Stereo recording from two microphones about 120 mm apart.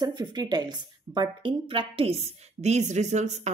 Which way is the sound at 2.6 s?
75° right (ahead or behind).